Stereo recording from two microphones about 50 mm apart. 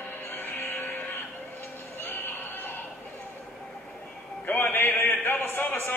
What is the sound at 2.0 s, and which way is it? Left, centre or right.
Neigh, left.